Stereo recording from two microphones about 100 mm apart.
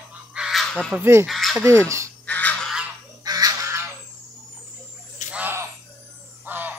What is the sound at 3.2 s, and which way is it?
Bird, 40° right (ahead or behind).